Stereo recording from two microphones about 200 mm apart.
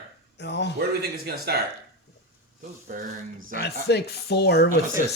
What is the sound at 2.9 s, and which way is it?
Speech, 40° right (ahead or behind).